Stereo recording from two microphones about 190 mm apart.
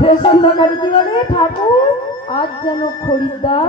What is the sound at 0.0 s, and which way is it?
Speech, 25° left (ahead or behind).